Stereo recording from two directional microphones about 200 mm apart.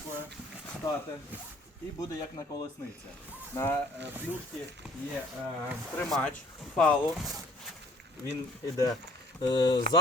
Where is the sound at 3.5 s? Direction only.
15° left (ahead or behind).